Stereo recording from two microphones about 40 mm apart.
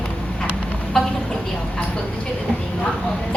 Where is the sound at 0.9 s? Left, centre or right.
Centre.